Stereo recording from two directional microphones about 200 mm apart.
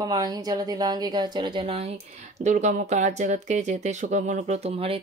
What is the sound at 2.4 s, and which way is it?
Speech, 35° right (ahead or behind).